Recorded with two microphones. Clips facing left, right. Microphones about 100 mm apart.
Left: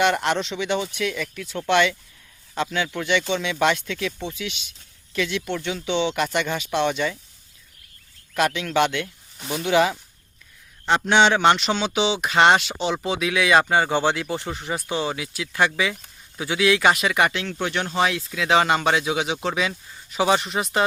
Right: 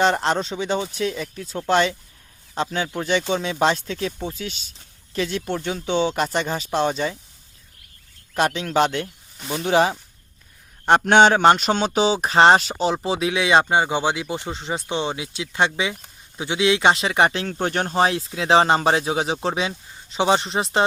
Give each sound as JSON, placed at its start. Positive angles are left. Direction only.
{"t": 0.0, "sound": "speech", "side_deg": -30}
{"t": 8.3, "sound": "speech", "side_deg": -35}
{"t": 9.4, "sound": "speech", "side_deg": 5}
{"t": 9.6, "sound": "speech", "side_deg": -35}
{"t": 10.8, "sound": "speech", "side_deg": -50}